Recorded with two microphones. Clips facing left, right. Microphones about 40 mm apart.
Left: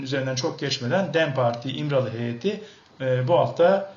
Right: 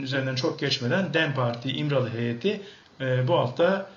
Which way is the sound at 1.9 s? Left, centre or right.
Centre.